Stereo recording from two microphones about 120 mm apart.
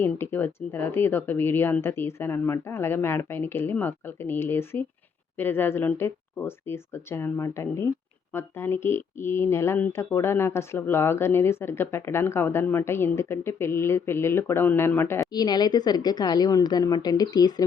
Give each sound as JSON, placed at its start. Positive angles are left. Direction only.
{"t": 0.0, "sound": "speech", "side_deg": 15}
{"t": 15.3, "sound": "a woman's voice", "side_deg": 35}